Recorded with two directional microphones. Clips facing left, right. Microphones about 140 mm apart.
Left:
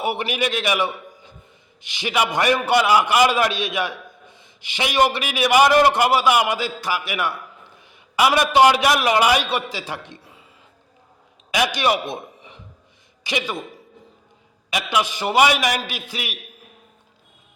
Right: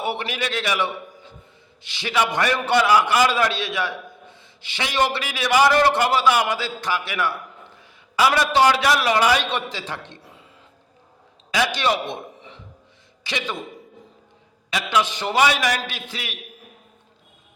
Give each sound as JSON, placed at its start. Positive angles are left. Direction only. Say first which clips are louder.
{"t": 0.0, "sound": "a man's voice", "louder": "left 3 dB", "side_deg": 15}
{"t": 7.8, "sound": "a sound", "louder": "left 1 dB", "side_deg": 15}
{"t": 8.4, "sound": "a man's voice", "louder": "left 5 dB", "side_deg": 15}
{"t": 10.2, "sound": "a sound", "louder": "right 1 dB", "side_deg": 0}
{"t": 11.5, "sound": "a man's voice", "louder": "left 1 dB", "side_deg": 15}
{"t": 14.7, "sound": "a man's voice", "louder": "even", "side_deg": 15}